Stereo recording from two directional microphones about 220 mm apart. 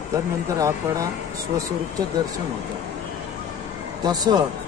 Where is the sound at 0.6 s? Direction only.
15° right (ahead or behind).